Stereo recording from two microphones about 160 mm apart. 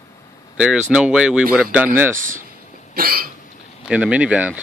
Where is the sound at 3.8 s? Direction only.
5° right (ahead or behind).